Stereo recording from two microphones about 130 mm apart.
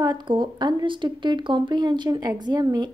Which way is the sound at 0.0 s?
35° right (ahead or behind).